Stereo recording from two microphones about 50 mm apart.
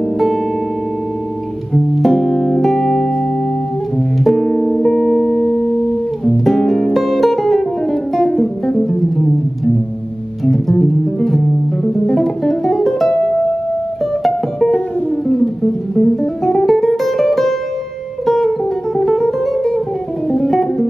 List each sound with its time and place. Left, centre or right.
1.7 s music: centre
2.1 s music: left
2.6 s music: centre
4.2 s music: centre
10.4 s music: centre
14.2 s music: centre